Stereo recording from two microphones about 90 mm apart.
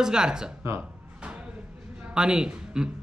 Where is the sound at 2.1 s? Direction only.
10° right (ahead or behind).